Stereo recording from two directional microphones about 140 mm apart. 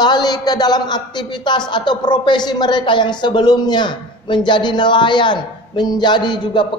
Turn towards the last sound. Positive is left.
turn(degrees=35)  # may be behind; listen again after turning